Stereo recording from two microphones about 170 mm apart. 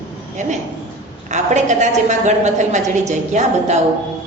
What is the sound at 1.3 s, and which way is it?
A woman's voice, 45° right (ahead or behind).